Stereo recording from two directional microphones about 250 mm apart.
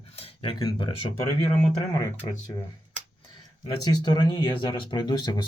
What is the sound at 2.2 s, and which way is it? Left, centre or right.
Speech, centre.